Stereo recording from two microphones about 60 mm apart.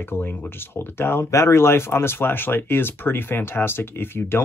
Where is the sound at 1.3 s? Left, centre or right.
Left.